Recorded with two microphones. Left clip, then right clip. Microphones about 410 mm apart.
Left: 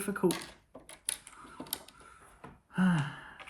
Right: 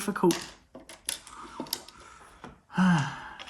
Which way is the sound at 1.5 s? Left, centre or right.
Centre.